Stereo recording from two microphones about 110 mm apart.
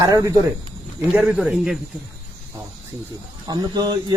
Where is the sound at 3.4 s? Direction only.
40° right (ahead or behind).